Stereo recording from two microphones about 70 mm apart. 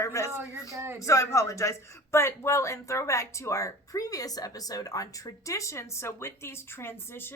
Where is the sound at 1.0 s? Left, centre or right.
Left.